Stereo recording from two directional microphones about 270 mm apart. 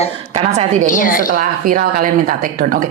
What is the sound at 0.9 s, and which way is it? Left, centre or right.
Speech, left.